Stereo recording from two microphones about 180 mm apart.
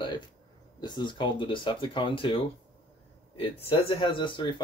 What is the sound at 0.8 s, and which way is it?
Speech, 25° left (ahead or behind).